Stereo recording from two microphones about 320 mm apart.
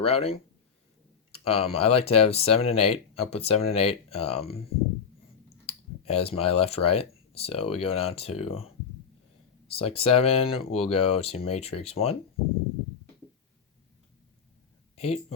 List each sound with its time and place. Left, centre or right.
0.0 s speech: centre
5.6 s speech: centre
14.9 s speech: centre